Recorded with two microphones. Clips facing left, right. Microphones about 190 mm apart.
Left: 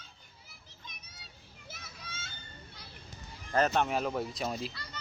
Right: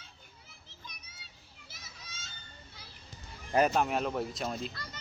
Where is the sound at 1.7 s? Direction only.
55° left (ahead or behind).